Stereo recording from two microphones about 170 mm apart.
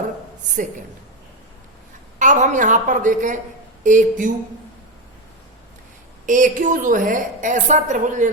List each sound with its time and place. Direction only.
2.1 s a woman's voice: 45° right (ahead or behind)
6.2 s a woman's voice: 50° right (ahead or behind)